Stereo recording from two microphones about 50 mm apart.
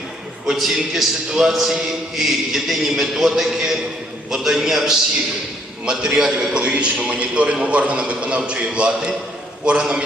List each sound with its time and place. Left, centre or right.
0.4 s a man's voice: centre